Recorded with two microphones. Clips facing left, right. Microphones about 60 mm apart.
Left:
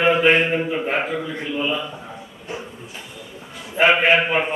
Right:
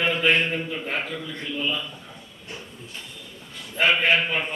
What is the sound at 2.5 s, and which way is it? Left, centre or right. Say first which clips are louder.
Printer: left 7 dB; centre.